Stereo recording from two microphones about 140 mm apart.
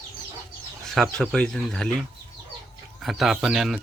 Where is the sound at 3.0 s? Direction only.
Centre (ahead or behind).